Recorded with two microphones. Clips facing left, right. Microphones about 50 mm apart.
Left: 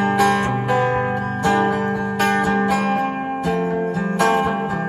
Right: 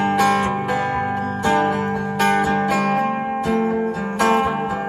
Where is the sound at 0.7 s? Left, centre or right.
Left.